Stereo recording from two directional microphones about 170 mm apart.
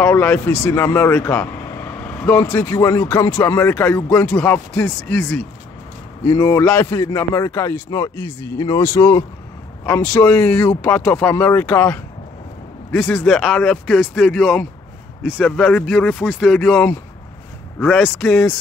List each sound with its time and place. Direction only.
0.0 s speech: 10° left (ahead or behind)
2.4 s a man's voice: 20° left (ahead or behind)
6.9 s a man's voice: 25° left (ahead or behind)
13.0 s speech: 5° left (ahead or behind)